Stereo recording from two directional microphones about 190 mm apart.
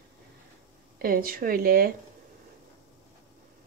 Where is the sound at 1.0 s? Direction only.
50° right (ahead or behind).